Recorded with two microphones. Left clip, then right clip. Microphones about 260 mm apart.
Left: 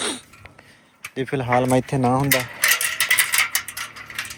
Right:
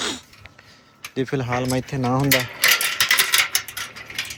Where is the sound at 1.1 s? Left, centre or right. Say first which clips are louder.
Left 3 dB; centre.